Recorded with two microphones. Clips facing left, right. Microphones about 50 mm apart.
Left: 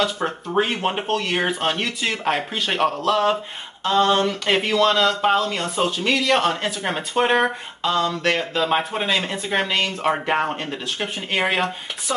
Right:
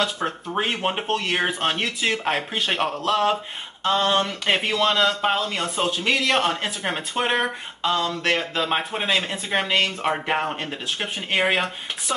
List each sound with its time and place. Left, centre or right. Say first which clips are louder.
0.0 s speech: left 2 dB; centre
7.8 s speech: left 2 dB; centre